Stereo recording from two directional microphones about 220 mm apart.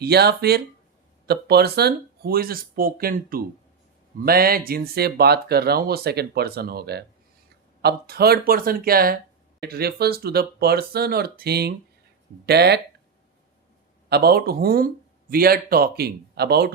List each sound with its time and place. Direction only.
0.0 s speech: 45° right (ahead or behind)
14.1 s speech: 45° right (ahead or behind)